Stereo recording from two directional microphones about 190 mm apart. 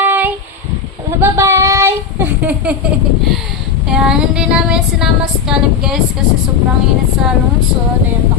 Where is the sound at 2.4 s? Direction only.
5° right (ahead or behind).